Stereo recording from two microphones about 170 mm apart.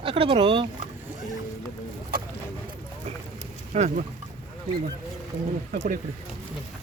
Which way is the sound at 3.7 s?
45° right (ahead or behind).